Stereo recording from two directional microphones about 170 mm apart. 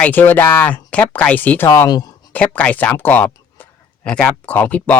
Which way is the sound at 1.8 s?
25° left (ahead or behind).